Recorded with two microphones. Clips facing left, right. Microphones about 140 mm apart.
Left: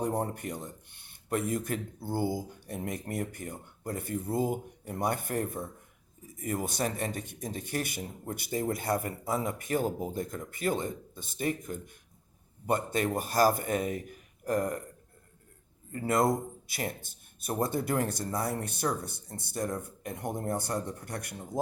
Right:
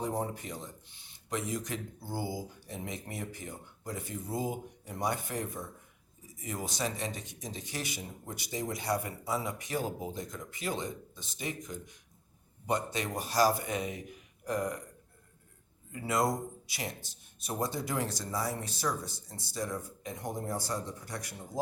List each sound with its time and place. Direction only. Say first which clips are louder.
0.0 s speech: left 3 dB; 55° left (ahead or behind)
15.9 s speech: left 4 dB; 50° left (ahead or behind)